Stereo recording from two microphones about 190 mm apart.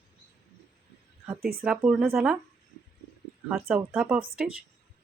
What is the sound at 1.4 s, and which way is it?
Speech, 50° right (ahead or behind).